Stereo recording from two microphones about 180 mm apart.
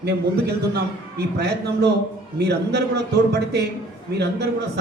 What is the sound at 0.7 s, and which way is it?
A man's voice, 65° right (ahead or behind).